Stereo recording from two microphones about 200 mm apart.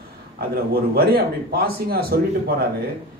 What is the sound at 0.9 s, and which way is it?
A man's voice, 50° right (ahead or behind).